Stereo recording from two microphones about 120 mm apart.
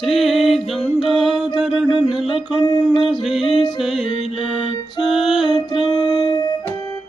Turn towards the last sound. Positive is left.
turn(degrees=40)  # may be behind; listen again after turning